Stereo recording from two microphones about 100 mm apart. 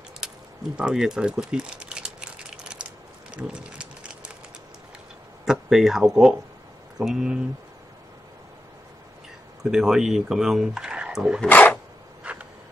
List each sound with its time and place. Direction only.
0.7 s a sound: 10° right (ahead or behind)
5.4 s speech: 5° right (ahead or behind)
9.6 s speech: 5° right (ahead or behind)
11.4 s speech: 20° left (ahead or behind)
12.2 s insect: 15° right (ahead or behind)